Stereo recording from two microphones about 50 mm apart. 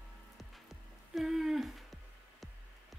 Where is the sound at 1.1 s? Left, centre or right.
Centre.